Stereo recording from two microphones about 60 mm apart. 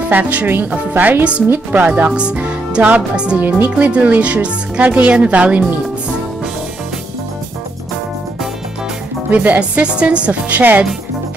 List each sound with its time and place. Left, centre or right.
0.1 s speech: right
2.1 s music: centre
3.3 s speech: right
3.8 s speech: right
9.3 s speech: right